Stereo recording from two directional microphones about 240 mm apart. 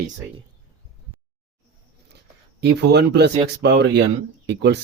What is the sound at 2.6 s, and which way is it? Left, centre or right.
Speech, right.